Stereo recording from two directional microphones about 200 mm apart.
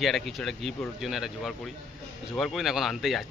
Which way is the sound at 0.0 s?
Centre (ahead or behind).